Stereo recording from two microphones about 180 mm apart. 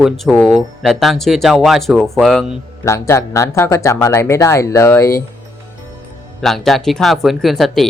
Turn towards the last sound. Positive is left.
turn(degrees=0)  # may be behind; listen again after turning